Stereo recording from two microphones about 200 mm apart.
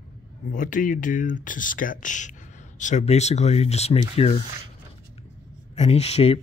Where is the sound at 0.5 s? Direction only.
40° left (ahead or behind).